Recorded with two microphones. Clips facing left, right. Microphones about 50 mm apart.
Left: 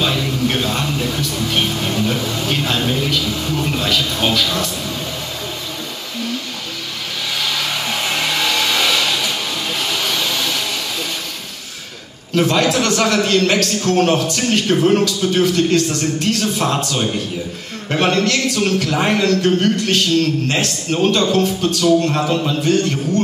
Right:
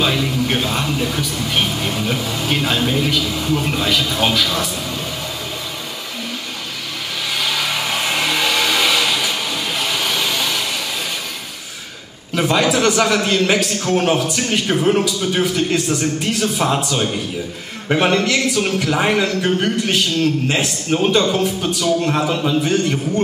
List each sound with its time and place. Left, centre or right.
0.0 s a sound: centre
3.8 s a man's voice: centre
12.4 s a man's voice: centre